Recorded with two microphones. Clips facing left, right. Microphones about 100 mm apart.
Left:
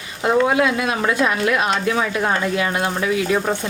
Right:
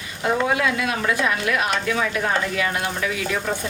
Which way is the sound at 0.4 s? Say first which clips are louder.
Left 4 dB; 25° left (ahead or behind).